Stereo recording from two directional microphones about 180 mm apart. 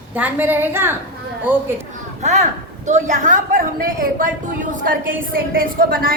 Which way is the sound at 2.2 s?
40° right (ahead or behind).